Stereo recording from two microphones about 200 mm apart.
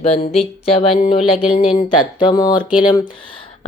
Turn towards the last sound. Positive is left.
turn(degrees=25)  # may be behind; listen again after turning